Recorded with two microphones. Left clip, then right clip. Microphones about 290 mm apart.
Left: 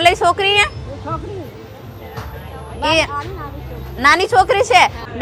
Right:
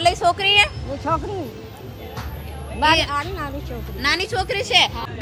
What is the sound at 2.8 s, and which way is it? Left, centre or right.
A woman's voice, left.